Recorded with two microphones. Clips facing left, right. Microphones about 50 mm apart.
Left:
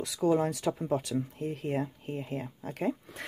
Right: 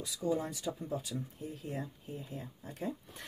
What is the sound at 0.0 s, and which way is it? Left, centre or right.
Speech, left.